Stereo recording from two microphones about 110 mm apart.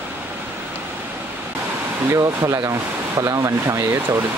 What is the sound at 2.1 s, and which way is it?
Speech, 30° right (ahead or behind).